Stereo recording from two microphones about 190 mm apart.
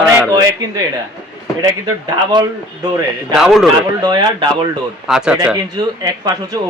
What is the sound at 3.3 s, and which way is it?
Speech, centre (ahead or behind).